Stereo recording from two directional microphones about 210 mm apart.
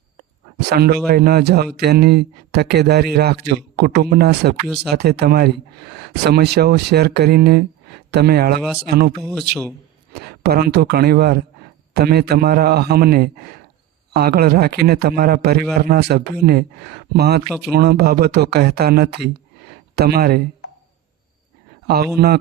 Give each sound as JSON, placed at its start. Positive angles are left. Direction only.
{"t": 0.7, "sound": "speech", "side_deg": -50}
{"t": 21.8, "sound": "speech", "side_deg": -50}